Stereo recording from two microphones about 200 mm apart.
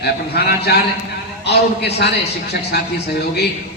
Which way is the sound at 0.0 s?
55° left (ahead or behind).